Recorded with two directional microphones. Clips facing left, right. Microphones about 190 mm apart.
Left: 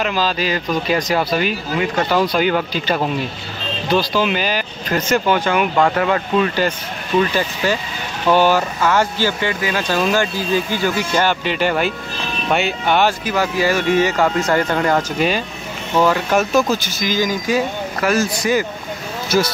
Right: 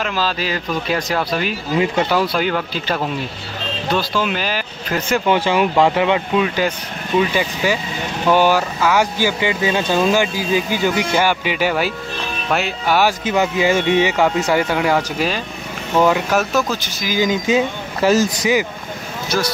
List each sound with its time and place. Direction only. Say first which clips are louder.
0.0 s speech: left 2 dB; centre (ahead or behind)
4.1 s speech: left 2 dB; 5° left (ahead or behind)
5.2 s speech: right 1 dB; 25° right (ahead or behind)
5.9 s speech: right 1 dB; 15° right (ahead or behind)
13.2 s speech: right 1 dB; 20° right (ahead or behind); by 15.4 s centre (ahead or behind)
16.0 s speech: even; 10° right (ahead or behind)
17.3 s speech: right 2 dB; 20° right (ahead or behind)